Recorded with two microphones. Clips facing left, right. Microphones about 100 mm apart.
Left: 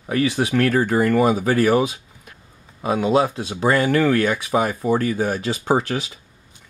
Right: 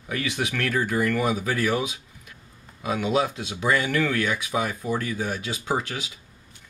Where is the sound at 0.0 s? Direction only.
35° left (ahead or behind).